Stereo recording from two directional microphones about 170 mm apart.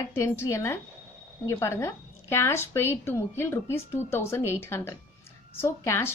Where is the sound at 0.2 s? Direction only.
15° left (ahead or behind).